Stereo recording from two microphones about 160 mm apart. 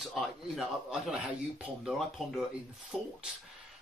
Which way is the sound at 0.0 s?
Centre (ahead or behind).